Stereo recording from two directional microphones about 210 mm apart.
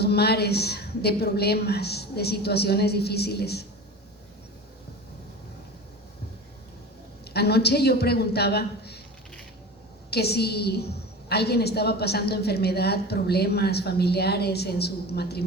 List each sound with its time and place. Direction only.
0.0 s a woman's voice: 50° left (ahead or behind)
7.3 s a woman's voice: 50° left (ahead or behind)
10.1 s a woman's voice: 50° left (ahead or behind)